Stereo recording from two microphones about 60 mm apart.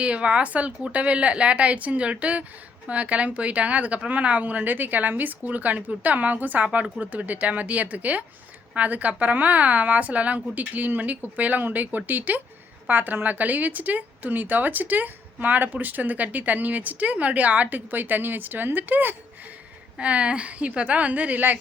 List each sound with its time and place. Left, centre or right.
0.0 s a woman's voice: centre
6.7 s a woman's voice: centre
20.0 s a woman's voice: right